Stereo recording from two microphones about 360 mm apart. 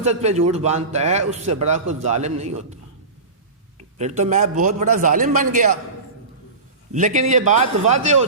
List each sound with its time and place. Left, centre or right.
0.0 s a man's voice: centre
3.9 s a man's voice: centre
6.9 s a man's voice: right